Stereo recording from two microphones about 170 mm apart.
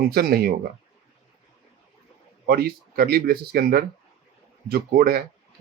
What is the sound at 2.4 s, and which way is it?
Speech, 65° right (ahead or behind).